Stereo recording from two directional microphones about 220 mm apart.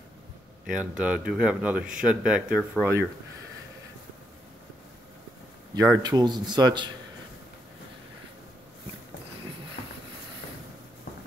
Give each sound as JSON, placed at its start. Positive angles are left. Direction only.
{"t": 0.7, "sound": "speech", "side_deg": -5}
{"t": 1.8, "sound": "speech", "side_deg": -35}
{"t": 2.0, "sound": "speech", "side_deg": -5}
{"t": 5.8, "sound": "speech", "side_deg": -15}